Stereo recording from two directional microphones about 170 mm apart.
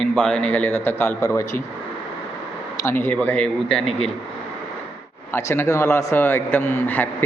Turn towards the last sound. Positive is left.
turn(degrees=10)  # may be behind; listen again after turning